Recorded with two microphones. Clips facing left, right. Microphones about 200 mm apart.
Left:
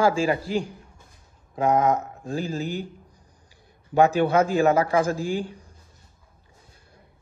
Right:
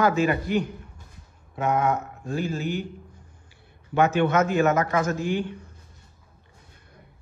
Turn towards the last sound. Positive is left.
turn(degrees=35)  # may be behind; listen again after turning